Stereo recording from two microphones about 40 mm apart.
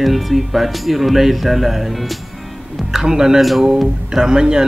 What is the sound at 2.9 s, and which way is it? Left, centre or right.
Speech, centre.